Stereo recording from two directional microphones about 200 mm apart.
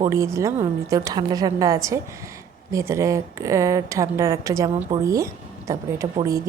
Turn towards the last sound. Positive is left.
turn(degrees=-15)  # may be behind; listen again after turning